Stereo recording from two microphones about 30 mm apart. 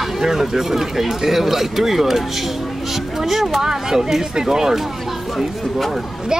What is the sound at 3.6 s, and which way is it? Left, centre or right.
Speech, centre.